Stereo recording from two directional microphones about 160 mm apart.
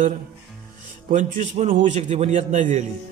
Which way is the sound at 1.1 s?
50° right (ahead or behind).